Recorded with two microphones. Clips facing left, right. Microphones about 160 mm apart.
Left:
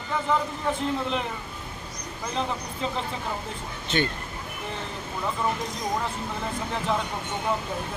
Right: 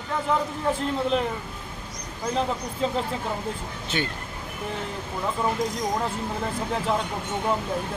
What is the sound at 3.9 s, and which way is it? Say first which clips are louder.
Speech: left 3 dB; 5° right (ahead or behind).